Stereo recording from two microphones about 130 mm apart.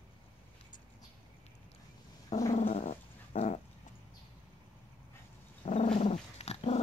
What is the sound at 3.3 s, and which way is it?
Dog, 90° left.